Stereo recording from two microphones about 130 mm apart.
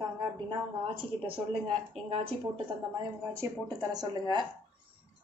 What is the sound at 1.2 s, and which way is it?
Speech, 45° right (ahead or behind).